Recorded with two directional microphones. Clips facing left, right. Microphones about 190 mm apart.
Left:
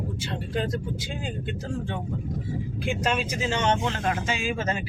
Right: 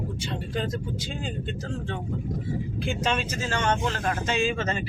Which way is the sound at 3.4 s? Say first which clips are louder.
Left 1 dB; 20° left (ahead or behind).